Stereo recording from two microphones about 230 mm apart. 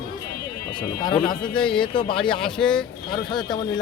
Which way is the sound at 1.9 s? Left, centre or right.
Left.